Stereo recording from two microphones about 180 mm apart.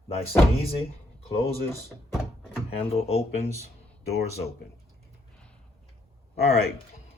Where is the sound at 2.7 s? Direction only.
35° left (ahead or behind).